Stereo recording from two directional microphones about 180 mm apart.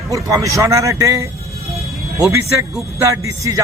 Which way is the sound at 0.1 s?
15° right (ahead or behind).